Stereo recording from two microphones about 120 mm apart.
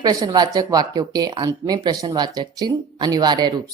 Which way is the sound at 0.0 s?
30° right (ahead or behind).